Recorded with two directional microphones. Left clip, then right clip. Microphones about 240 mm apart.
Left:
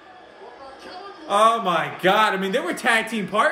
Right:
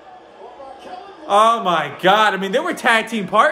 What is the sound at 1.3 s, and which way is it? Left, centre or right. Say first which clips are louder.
A man's voice: right 4 dB; centre.